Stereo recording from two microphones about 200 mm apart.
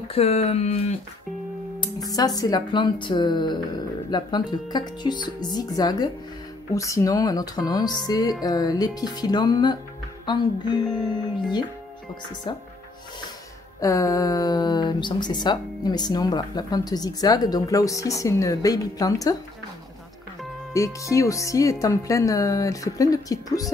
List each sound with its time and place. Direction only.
0.1 s speech: 30° left (ahead or behind)
1.8 s speech: 20° left (ahead or behind)
12.5 s speech: 25° left (ahead or behind)
13.7 s speech: 15° left (ahead or behind)
20.7 s speech: 15° left (ahead or behind)